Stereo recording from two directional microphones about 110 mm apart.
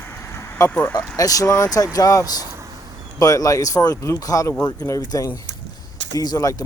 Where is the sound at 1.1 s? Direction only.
30° left (ahead or behind).